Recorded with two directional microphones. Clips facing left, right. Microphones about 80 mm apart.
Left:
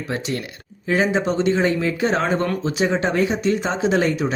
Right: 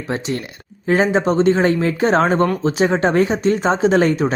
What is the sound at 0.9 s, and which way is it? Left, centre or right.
Speech, right.